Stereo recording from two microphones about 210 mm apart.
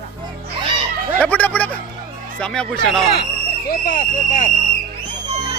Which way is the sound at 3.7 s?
40° left (ahead or behind).